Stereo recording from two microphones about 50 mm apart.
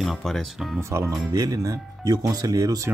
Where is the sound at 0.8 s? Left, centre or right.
Right.